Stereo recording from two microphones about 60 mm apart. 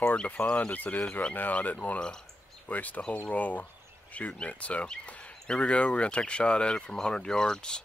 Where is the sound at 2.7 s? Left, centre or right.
Left.